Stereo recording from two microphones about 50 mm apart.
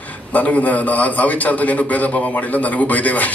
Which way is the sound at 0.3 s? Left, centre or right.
Left.